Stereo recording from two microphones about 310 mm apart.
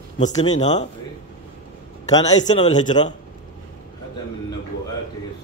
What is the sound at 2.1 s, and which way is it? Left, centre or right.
A man's voice, centre.